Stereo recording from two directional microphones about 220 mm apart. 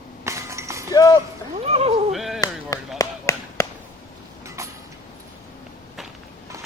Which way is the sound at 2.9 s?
15° left (ahead or behind).